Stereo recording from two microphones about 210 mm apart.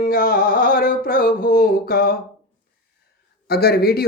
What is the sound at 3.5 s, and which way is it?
Mantra, 50° left (ahead or behind).